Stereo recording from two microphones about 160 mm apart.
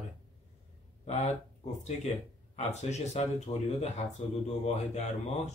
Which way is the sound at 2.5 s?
45° left (ahead or behind).